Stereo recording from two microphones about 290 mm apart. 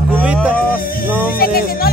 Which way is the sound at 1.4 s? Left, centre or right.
Left.